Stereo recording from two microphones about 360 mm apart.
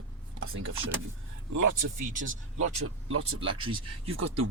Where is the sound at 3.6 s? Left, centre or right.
Centre.